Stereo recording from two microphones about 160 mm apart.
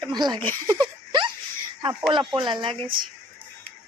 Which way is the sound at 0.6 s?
30° right (ahead or behind).